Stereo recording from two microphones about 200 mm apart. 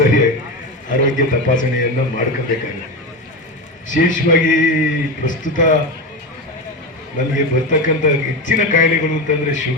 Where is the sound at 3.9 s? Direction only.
40° left (ahead or behind).